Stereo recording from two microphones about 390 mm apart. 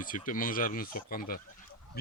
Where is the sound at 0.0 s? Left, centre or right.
Left.